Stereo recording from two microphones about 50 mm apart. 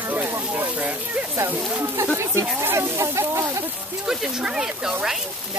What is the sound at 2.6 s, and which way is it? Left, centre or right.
Speech, right.